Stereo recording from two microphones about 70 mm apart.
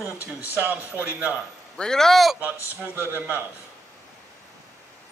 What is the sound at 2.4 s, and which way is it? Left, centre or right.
Speech, right.